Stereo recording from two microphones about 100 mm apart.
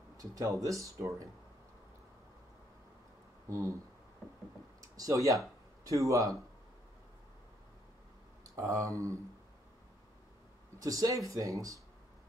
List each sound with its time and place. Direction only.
0.2 s speech: 35° right (ahead or behind)
3.4 s speech: 30° right (ahead or behind)
4.9 s speech: 35° right (ahead or behind)
8.5 s speech: 30° right (ahead or behind)
10.8 s speech: 35° right (ahead or behind)